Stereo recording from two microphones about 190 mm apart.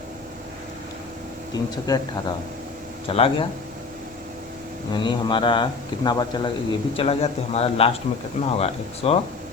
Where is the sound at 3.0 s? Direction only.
30° left (ahead or behind).